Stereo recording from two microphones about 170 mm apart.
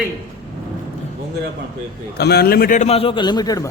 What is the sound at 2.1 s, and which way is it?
A man's voice, 70° left (ahead or behind).